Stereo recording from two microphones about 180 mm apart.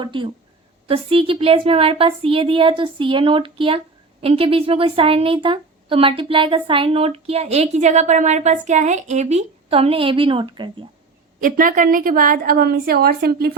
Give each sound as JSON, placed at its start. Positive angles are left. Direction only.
{"t": 0.0, "sound": "a woman's voice", "side_deg": -25}
{"t": 11.3, "sound": "a woman's voice", "side_deg": -50}